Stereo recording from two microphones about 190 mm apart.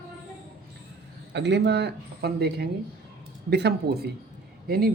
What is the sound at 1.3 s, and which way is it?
Speech, 65° right (ahead or behind).